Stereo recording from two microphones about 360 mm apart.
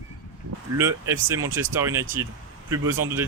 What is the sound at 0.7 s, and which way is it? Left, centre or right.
Speech, centre.